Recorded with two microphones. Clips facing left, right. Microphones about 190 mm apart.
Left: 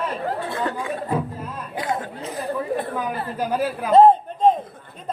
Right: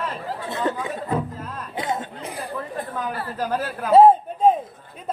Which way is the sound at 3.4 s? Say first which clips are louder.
Left 3 dB; 10° left (ahead or behind).